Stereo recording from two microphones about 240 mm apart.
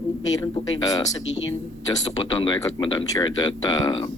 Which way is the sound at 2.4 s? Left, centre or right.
Centre.